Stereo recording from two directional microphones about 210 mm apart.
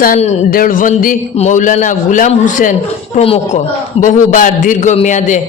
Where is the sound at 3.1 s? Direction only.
25° left (ahead or behind).